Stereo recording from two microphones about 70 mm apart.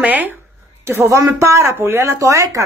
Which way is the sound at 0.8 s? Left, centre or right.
Right.